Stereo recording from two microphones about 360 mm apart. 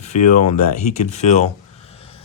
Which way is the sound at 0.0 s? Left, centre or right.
Centre.